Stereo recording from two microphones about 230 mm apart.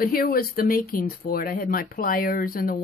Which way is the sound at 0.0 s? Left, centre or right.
Left.